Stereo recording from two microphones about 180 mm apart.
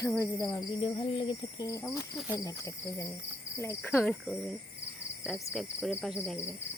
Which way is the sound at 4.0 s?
Centre (ahead or behind).